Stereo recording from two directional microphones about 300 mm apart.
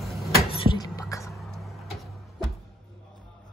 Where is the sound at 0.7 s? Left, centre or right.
Centre.